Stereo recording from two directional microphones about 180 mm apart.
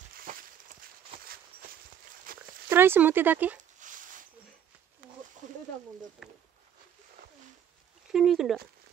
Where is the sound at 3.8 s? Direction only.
45° right (ahead or behind).